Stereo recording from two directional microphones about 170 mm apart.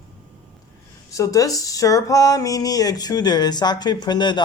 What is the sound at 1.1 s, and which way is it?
Speech, 20° left (ahead or behind).